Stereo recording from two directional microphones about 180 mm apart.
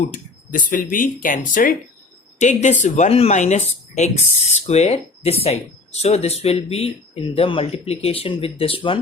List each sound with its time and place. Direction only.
0.1 s speech: 50° left (ahead or behind); by 9.0 s 30° left (ahead or behind)